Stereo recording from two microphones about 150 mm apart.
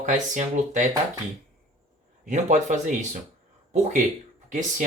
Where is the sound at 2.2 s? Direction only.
55° right (ahead or behind).